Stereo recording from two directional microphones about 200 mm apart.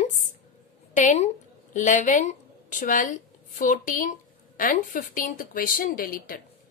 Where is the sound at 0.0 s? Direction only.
40° left (ahead or behind).